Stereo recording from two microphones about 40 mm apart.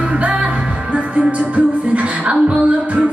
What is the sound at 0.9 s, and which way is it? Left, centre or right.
Music, right.